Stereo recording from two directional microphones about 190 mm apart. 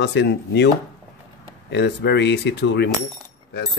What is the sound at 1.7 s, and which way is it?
Speech, 60° left (ahead or behind).